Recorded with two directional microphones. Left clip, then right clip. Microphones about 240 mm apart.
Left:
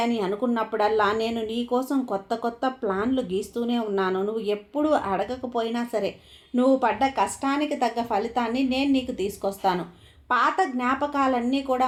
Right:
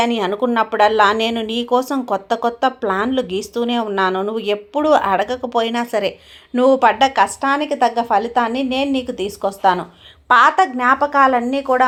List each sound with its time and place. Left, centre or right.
0.0 s speech: right